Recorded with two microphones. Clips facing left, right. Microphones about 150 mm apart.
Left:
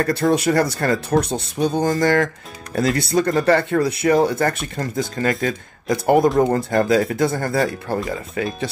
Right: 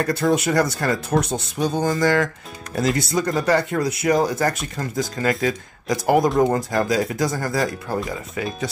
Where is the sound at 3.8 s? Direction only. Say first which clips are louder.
Left 3 dB; 30° left (ahead or behind).